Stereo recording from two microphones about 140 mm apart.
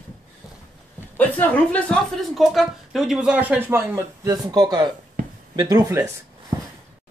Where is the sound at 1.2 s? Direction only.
10° left (ahead or behind); by 4.9 s 30° right (ahead or behind).